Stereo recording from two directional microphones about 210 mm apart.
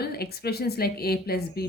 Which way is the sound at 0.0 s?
50° left (ahead or behind).